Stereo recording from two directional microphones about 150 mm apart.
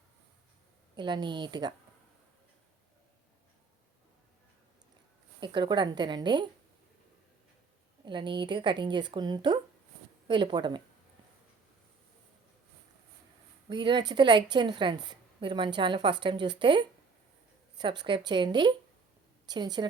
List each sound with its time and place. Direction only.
0.9 s a woman's voice: 30° right (ahead or behind)
5.4 s a woman's voice: 30° right (ahead or behind)
8.0 s a woman's voice: 30° right (ahead or behind)
13.7 s a woman's voice: 30° right (ahead or behind)